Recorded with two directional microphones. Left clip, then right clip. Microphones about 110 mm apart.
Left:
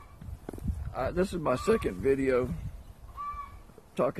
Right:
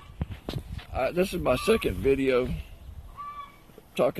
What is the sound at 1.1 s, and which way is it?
Speech, 15° right (ahead or behind).